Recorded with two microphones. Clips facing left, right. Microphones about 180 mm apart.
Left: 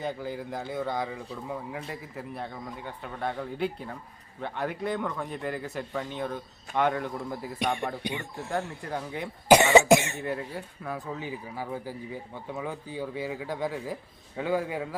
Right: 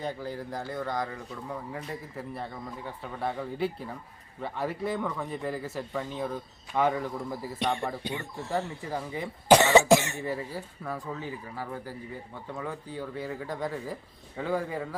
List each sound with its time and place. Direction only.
0.0 s speech: centre (ahead or behind)
7.6 s cough: 15° left (ahead or behind)
8.5 s speech: 5° right (ahead or behind)
9.5 s cough: 15° left (ahead or behind)
10.2 s speech: 5° right (ahead or behind)